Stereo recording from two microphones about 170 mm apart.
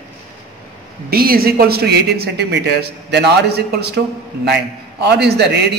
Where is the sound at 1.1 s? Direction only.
60° right (ahead or behind).